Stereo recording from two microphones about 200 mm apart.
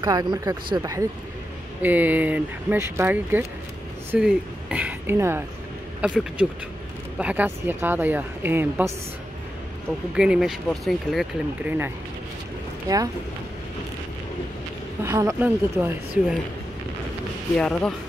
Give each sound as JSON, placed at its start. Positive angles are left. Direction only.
{"t": 0.0, "sound": "speech", "side_deg": -20}
{"t": 10.1, "sound": "speech", "side_deg": -5}
{"t": 15.0, "sound": "speech", "side_deg": -15}
{"t": 17.6, "sound": "speech", "side_deg": 5}